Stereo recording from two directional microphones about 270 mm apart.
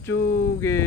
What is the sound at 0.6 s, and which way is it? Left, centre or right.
Speech, centre.